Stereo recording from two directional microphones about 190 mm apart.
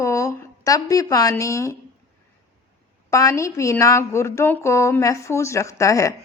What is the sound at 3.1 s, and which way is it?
A woman's voice, 15° left (ahead or behind).